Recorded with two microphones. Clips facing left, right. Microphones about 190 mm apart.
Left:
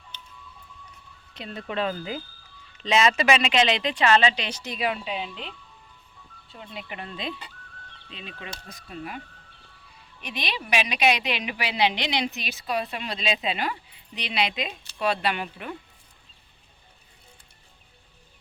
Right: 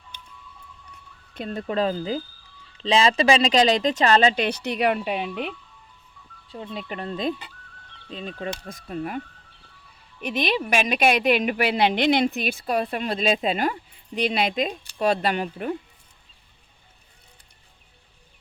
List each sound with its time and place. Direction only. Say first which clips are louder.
1.3 s speech: right 6 dB; 50° right (ahead or behind)
6.5 s speech: right 6 dB; 35° right (ahead or behind)